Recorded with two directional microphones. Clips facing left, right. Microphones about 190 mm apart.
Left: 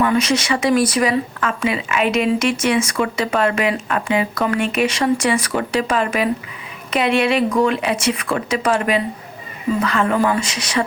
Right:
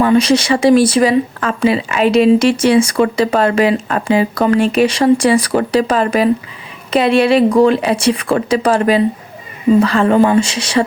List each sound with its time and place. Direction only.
0.0 s speech: 30° right (ahead or behind)